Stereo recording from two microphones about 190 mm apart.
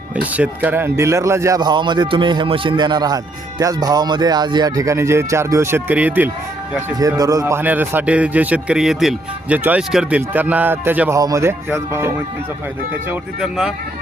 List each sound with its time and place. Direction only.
0.2 s a man's voice: 5° right (ahead or behind)